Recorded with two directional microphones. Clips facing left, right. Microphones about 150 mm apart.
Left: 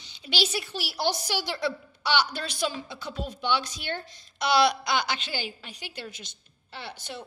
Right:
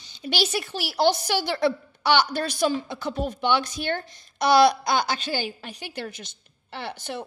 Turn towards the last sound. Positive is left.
turn(degrees=-55)  # may be behind; listen again after turning